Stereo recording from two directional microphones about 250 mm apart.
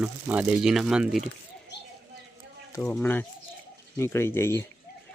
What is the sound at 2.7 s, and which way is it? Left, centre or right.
Speech, centre.